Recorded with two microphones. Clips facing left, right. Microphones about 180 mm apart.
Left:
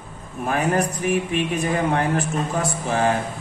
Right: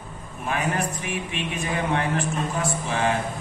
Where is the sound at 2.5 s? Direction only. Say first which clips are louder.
Left 3 dB; 35° left (ahead or behind).